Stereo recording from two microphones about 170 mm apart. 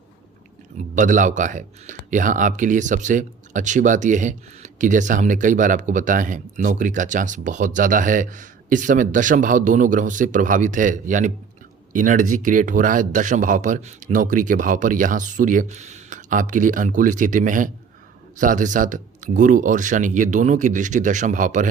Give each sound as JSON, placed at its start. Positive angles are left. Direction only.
{"t": 0.8, "sound": "speech", "side_deg": -50}